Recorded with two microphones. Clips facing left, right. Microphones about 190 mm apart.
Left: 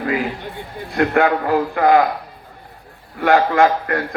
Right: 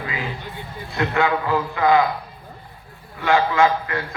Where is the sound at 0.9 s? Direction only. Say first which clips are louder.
Left 5 dB; 55° left (ahead or behind).